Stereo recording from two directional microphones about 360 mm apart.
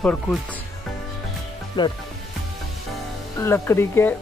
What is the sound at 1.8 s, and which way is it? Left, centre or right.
Speech, centre.